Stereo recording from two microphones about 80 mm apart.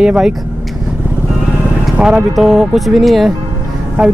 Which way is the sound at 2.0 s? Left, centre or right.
Centre.